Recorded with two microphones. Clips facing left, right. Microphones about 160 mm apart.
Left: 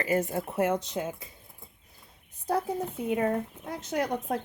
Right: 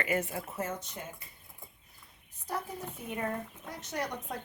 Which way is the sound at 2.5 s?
65° left (ahead or behind).